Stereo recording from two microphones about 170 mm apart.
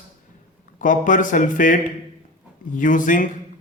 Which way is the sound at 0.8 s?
50° left (ahead or behind).